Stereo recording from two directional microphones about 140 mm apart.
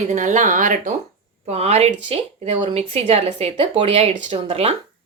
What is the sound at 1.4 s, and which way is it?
A woman's voice, 50° right (ahead or behind).